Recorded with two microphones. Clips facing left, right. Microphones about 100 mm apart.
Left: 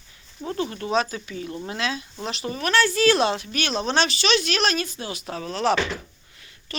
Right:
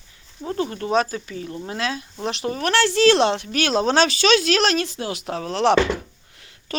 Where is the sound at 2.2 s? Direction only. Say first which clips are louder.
Right 4 dB; 65° right (ahead or behind).